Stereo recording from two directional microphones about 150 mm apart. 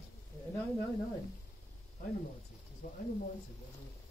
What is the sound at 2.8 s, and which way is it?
Speech, 70° left (ahead or behind).